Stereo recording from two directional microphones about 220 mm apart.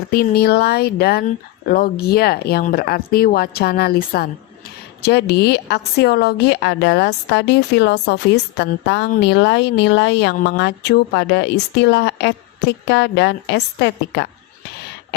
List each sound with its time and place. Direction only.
0.1 s a woman's voice: 45° left (ahead or behind)